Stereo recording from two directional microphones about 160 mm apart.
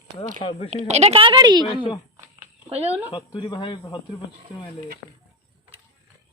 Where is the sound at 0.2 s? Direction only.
35° left (ahead or behind).